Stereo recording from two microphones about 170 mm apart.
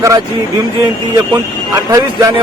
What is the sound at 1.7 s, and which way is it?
Speech, 20° right (ahead or behind).